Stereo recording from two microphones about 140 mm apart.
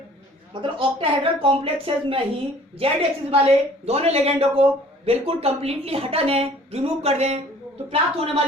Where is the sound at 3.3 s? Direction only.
45° right (ahead or behind).